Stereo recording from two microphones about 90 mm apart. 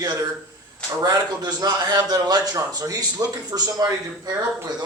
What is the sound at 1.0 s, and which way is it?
A man's voice, 50° right (ahead or behind).